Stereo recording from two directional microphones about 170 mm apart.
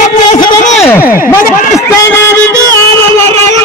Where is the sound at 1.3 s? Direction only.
15° left (ahead or behind).